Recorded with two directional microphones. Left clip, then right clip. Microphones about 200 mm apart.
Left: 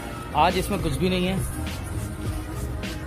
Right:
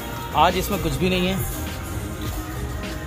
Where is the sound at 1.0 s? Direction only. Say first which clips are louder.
Right 3 dB; 50° left (ahead or behind).